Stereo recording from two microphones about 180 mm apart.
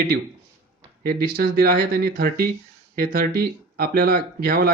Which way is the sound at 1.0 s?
55° right (ahead or behind).